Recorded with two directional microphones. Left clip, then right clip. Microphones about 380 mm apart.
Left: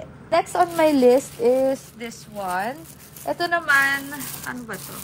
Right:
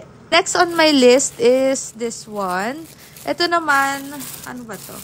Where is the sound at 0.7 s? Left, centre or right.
Left.